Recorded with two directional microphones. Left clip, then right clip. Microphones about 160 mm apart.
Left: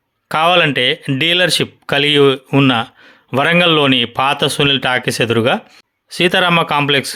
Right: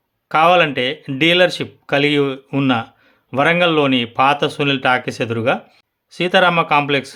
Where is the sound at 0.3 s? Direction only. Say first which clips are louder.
Even; 30° left (ahead or behind).